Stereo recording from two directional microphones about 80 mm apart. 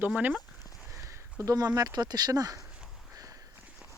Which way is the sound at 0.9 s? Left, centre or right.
Right.